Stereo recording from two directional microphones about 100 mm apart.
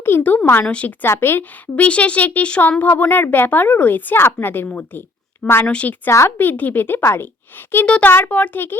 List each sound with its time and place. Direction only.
0.0 s a woman's voice: 20° left (ahead or behind)
1.0 s a woman's voice: 25° left (ahead or behind)
6.1 s a woman's voice: 25° left (ahead or behind)